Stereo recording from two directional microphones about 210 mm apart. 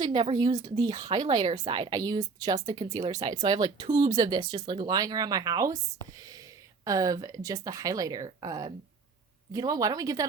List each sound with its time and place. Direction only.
0.0 s speech: 20° right (ahead or behind)